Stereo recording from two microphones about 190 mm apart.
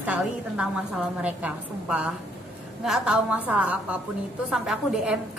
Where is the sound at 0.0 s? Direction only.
5° right (ahead or behind).